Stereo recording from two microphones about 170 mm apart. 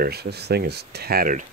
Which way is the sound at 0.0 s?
70° right (ahead or behind).